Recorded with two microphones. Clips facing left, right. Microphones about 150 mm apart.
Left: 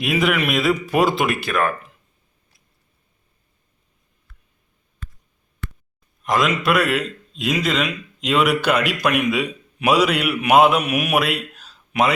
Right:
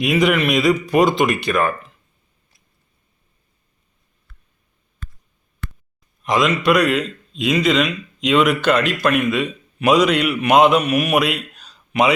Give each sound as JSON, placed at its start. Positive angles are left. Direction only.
{"t": 0.0, "sound": "a man's voice", "side_deg": 0}
{"t": 6.2, "sound": "a man's voice", "side_deg": 0}